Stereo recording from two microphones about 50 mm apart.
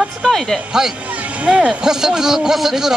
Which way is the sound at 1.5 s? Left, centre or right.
Right.